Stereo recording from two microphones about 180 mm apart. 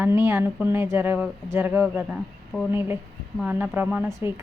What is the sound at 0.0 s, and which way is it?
Speech, 15° right (ahead or behind).